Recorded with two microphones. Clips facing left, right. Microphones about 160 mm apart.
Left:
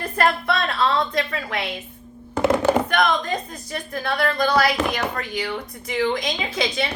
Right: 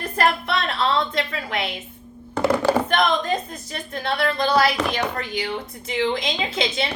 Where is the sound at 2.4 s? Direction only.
20° left (ahead or behind).